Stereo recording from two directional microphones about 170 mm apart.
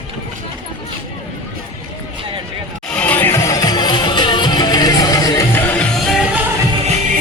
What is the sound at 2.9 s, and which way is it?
Music, 10° left (ahead or behind).